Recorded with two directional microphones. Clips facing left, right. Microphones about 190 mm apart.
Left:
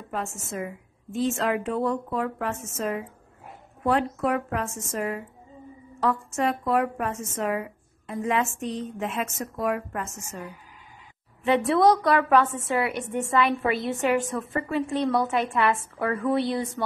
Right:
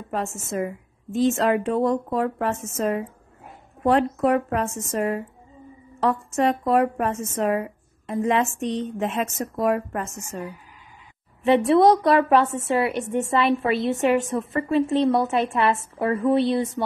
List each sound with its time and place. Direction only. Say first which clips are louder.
0.1 s a woman's voice: right 5 dB; 35° right (ahead or behind)
11.4 s a woman's voice: right 4 dB; 25° right (ahead or behind)